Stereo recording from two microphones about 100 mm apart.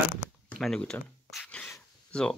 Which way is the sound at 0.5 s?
10° left (ahead or behind).